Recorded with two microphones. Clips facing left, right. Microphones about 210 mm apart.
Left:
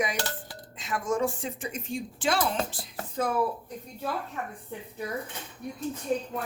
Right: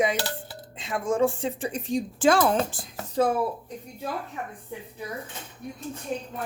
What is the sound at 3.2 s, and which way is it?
Speech, 30° right (ahead or behind).